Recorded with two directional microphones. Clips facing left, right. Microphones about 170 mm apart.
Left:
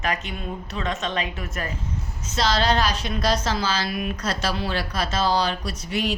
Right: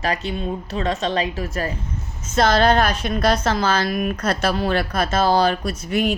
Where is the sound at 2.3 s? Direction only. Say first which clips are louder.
Right 6 dB; 55° right (ahead or behind).